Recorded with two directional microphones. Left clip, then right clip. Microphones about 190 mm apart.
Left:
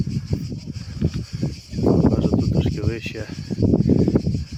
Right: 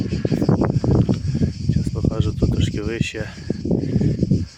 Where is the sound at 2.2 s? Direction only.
20° right (ahead or behind).